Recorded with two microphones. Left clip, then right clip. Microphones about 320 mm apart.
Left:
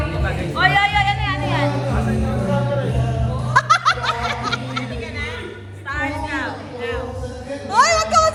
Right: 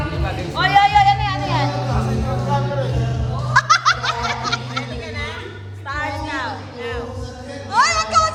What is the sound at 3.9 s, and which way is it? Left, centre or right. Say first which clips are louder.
Snicker: right 1 dB; centre.